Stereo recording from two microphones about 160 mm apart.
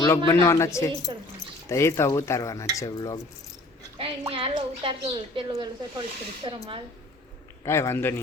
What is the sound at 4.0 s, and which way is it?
A woman's voice, 35° right (ahead or behind).